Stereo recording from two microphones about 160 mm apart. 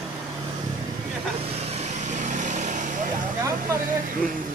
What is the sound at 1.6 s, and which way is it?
Vehicle, 45° right (ahead or behind).